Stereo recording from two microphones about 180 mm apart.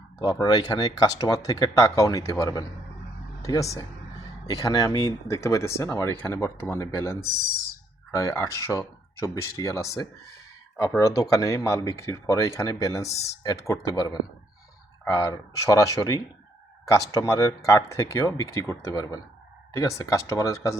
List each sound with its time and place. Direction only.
0.2 s speech: 20° left (ahead or behind)